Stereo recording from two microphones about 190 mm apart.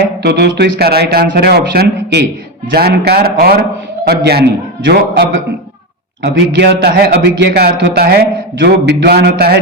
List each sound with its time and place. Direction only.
0.2 s a man's voice: 60° right (ahead or behind)